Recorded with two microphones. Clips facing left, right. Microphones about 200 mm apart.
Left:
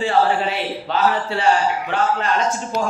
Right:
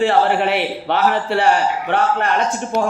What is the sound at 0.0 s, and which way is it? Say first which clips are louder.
A man's voice: right 3 dB; 65° right (ahead or behind).